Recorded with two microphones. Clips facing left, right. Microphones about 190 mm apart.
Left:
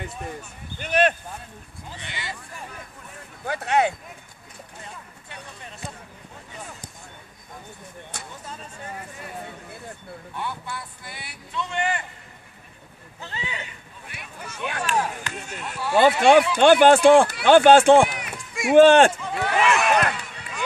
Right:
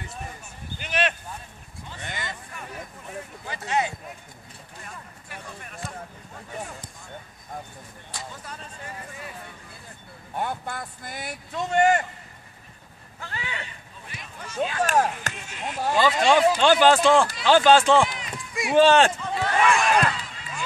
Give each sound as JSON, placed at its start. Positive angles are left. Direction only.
{"t": 0.7, "sound": "speech", "side_deg": 45}
{"t": 2.0, "sound": "speech", "side_deg": -45}
{"t": 3.4, "sound": "speech", "side_deg": 60}
{"t": 4.8, "sound": "speech", "side_deg": 25}
{"t": 10.3, "sound": "speech", "side_deg": -45}
{"t": 13.2, "sound": "speech", "side_deg": 20}
{"t": 14.6, "sound": "speech", "side_deg": 65}
{"t": 14.9, "sound": "speech", "side_deg": -45}
{"t": 15.3, "sound": "speech", "side_deg": 45}
{"t": 15.9, "sound": "speech", "side_deg": 60}
{"t": 18.3, "sound": "run", "side_deg": 0}
{"t": 18.7, "sound": "speech", "side_deg": 55}
{"t": 19.4, "sound": "a sound", "side_deg": 10}